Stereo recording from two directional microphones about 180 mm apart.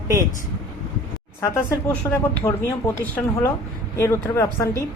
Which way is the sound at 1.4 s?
15° left (ahead or behind).